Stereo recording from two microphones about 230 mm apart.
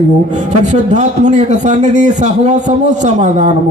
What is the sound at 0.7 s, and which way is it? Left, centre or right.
A man's voice, right.